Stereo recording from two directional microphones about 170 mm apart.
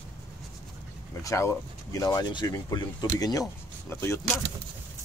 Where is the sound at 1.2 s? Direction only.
20° left (ahead or behind).